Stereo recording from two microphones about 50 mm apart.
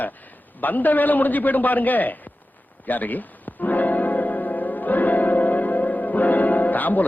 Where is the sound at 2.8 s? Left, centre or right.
Left.